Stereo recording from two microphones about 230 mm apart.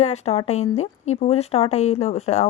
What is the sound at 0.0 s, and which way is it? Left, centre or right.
A woman's voice, left.